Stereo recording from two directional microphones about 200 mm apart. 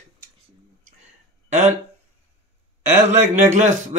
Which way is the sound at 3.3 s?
35° right (ahead or behind).